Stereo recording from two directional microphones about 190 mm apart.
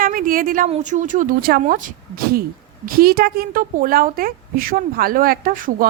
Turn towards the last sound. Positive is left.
turn(degrees=-45)  # may be behind; listen again after turning